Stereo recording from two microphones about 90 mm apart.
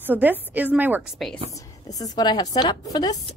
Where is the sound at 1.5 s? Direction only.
40° left (ahead or behind).